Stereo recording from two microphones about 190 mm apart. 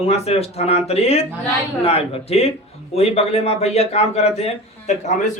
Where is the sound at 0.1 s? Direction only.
30° left (ahead or behind).